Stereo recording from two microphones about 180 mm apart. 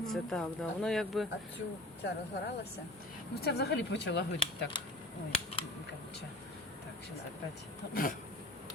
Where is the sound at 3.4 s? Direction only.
60° left (ahead or behind).